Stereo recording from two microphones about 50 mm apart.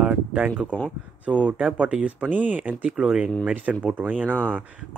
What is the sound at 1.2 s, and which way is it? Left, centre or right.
Speech, right.